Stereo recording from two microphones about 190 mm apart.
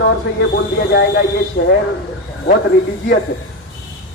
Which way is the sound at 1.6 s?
50° left (ahead or behind).